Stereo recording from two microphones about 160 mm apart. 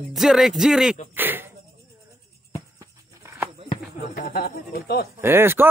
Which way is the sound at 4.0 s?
65° left (ahead or behind).